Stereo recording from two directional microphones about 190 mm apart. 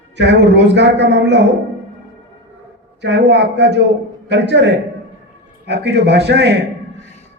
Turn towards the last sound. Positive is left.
turn(degrees=-60)  # may be behind; listen again after turning